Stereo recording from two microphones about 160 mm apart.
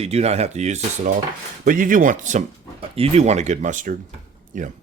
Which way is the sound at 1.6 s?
60° right (ahead or behind).